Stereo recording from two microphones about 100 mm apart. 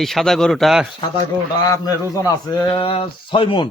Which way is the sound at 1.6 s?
35° left (ahead or behind).